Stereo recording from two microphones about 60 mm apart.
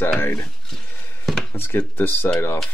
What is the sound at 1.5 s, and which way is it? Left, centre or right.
Speech, left.